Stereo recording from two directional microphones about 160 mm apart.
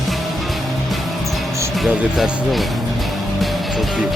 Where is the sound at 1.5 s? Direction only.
20° right (ahead or behind).